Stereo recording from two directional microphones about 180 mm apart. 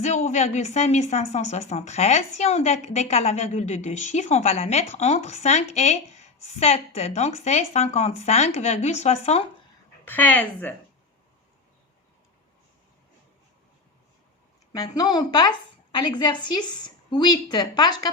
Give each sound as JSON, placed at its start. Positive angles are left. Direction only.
{"t": 0.0, "sound": "a woman's voice", "side_deg": 40}
{"t": 10.1, "sound": "a woman's voice", "side_deg": 10}
{"t": 14.7, "sound": "a woman's voice", "side_deg": 20}